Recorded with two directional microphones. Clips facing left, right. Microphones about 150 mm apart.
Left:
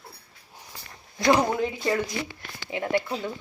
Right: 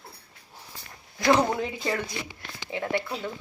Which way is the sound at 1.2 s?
10° left (ahead or behind).